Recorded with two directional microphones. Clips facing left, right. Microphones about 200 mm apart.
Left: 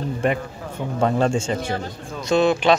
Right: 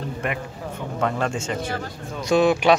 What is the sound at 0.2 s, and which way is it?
Speech, 30° left (ahead or behind).